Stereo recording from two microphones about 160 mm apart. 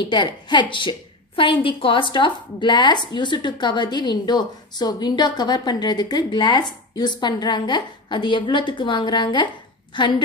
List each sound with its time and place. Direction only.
0.1 s a woman's voice: 30° left (ahead or behind)